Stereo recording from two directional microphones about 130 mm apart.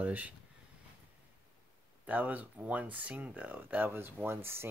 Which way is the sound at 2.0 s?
10° right (ahead or behind).